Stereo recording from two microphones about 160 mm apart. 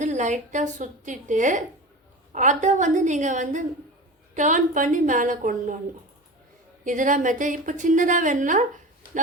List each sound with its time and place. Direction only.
0.0 s a woman's voice: 50° right (ahead or behind)
6.8 s a woman's voice: 55° right (ahead or behind)